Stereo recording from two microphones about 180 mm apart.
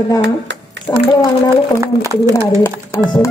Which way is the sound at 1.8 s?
15° right (ahead or behind).